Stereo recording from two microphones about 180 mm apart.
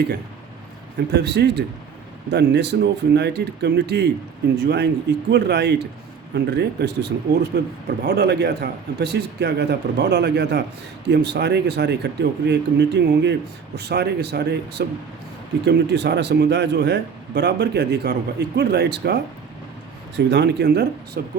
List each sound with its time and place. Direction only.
1.1 s speech: 70° right (ahead or behind)
7.5 s speech: 55° right (ahead or behind)
8.0 s speech: 65° right (ahead or behind)
21.2 s speech: 60° right (ahead or behind)